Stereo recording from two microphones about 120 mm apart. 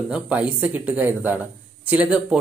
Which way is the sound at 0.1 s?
10° right (ahead or behind).